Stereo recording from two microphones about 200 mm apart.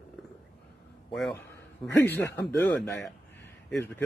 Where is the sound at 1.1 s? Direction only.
Centre (ahead or behind).